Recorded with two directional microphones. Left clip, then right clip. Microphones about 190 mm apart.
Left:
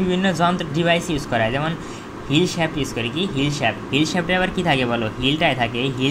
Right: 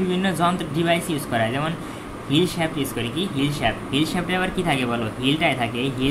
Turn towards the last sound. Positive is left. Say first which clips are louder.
# left 2 dB
turn(degrees=20)  # may be behind; listen again after turning